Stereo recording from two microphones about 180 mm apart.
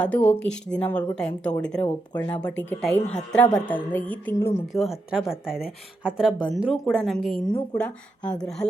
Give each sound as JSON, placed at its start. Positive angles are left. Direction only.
{"t": 0.0, "sound": "speech", "side_deg": 10}
{"t": 4.7, "sound": "speech", "side_deg": 0}
{"t": 7.4, "sound": "speech", "side_deg": 20}
{"t": 8.3, "sound": "speech", "side_deg": 5}